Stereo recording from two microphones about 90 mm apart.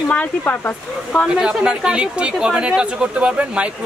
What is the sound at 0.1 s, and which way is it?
Speech, 15° left (ahead or behind).